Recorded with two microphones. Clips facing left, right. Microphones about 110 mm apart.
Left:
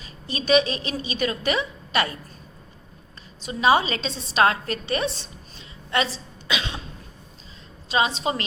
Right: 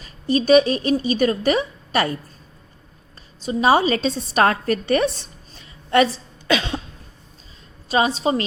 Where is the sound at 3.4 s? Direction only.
35° right (ahead or behind).